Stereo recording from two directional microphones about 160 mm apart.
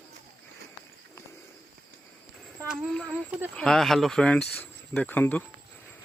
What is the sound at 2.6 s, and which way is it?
Speech, 5° left (ahead or behind).